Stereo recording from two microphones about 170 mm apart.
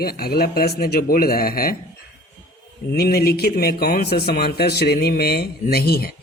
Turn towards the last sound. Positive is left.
turn(degrees=65)  # may be behind; listen again after turning